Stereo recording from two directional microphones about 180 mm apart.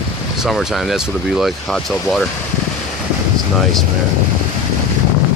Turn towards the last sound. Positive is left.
turn(degrees=0)  # may be behind; listen again after turning